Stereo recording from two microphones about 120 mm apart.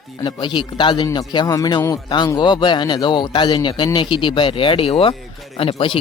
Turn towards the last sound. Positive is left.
turn(degrees=45)  # may be behind; listen again after turning